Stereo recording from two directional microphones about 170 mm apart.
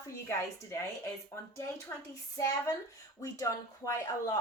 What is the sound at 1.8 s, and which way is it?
Speech, 20° left (ahead or behind).